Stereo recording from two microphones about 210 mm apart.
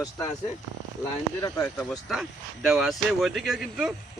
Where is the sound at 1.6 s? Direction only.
Centre (ahead or behind).